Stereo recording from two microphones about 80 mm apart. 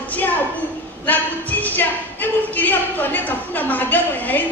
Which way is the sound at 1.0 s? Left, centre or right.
Left.